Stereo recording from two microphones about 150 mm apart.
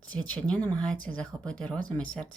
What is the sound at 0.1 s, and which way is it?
Speech, 10° left (ahead or behind).